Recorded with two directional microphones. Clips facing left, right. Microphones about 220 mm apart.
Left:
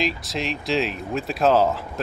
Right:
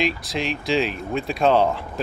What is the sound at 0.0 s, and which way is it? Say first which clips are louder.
Speech: right 2 dB; centre (ahead or behind).